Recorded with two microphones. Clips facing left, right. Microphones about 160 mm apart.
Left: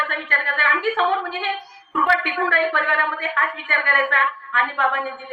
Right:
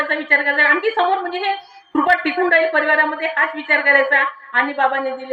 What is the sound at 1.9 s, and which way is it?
Speech, 40° right (ahead or behind).